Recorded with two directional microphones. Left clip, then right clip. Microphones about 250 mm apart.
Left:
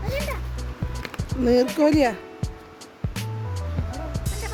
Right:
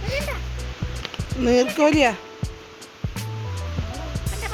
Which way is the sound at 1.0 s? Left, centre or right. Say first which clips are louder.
Right 1 dB; centre.